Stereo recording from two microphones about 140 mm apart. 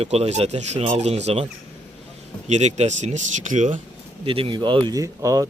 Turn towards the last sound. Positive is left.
turn(degrees=-25)  # may be behind; listen again after turning